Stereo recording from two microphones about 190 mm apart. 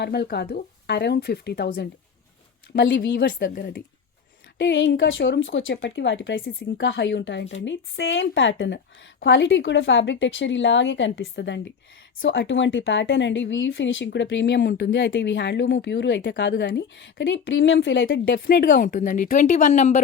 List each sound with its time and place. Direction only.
0.0 s speech: 60° left (ahead or behind)
3.3 s speech: 45° left (ahead or behind)
4.5 s speech: 70° left (ahead or behind)
18.3 s speech: 50° left (ahead or behind)